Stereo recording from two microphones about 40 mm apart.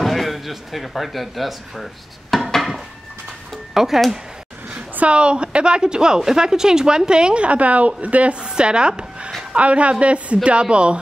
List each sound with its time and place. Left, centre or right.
0.0 s speech: centre
2.3 s dishes: centre
3.7 s speech: centre
4.6 s a woman's voice: right
9.6 s a woman's voice: right